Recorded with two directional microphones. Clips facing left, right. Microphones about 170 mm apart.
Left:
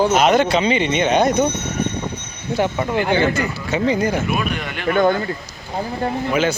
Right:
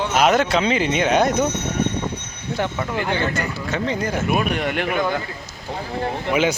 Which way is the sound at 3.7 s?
5° left (ahead or behind).